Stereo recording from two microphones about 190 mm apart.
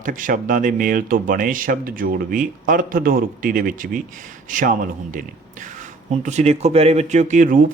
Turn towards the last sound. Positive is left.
turn(degrees=-45)  # may be behind; listen again after turning